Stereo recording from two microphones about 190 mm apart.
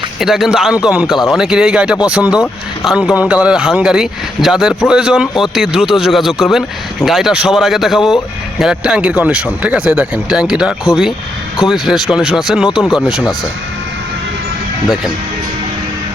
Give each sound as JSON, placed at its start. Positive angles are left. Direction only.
{"t": 0.2, "sound": "speech", "side_deg": 0}